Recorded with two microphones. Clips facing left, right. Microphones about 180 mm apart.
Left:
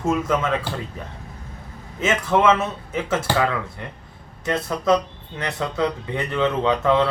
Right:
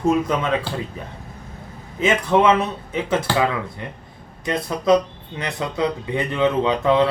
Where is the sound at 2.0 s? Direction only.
15° right (ahead or behind).